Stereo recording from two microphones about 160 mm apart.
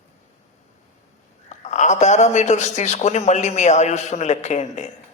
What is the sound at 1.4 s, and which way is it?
A man's voice, 45° left (ahead or behind).